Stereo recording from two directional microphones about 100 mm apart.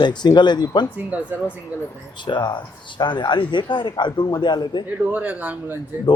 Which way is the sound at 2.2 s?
50° left (ahead or behind).